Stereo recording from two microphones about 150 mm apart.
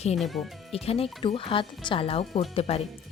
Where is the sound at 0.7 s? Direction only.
40° left (ahead or behind).